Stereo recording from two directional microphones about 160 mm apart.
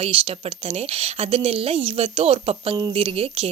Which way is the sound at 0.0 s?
35° right (ahead or behind).